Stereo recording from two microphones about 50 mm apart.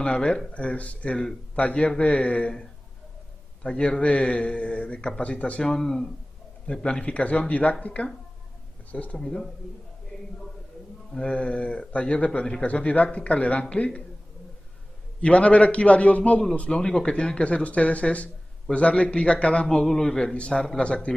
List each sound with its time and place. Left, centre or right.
0.0 s a man's voice: centre
3.6 s speech: centre
5.7 s speech: centre
9.2 s speech: centre
11.1 s speech: left
12.6 s speech: left
15.2 s speech: left